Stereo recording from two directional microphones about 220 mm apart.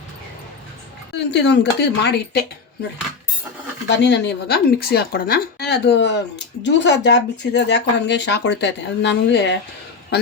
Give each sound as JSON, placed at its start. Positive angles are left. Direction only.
{"t": 1.3, "sound": "speech", "side_deg": 50}
{"t": 3.8, "sound": "speech", "side_deg": 50}